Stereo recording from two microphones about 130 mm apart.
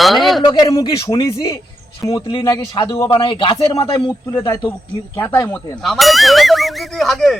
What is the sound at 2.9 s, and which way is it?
Speech, 20° left (ahead or behind).